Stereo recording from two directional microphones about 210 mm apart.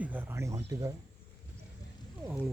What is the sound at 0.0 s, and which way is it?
Speech, 10° right (ahead or behind).